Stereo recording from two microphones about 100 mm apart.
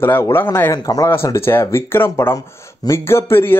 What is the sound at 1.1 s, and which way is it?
Speech, 25° left (ahead or behind).